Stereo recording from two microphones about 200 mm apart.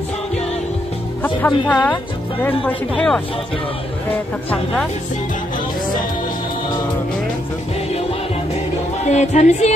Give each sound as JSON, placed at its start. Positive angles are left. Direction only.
{"t": 1.2, "sound": "speech", "side_deg": 10}
{"t": 9.0, "sound": "speech", "side_deg": 35}